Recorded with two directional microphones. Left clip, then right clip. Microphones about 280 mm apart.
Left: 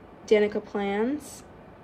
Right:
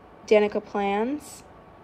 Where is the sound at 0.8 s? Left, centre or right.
Centre.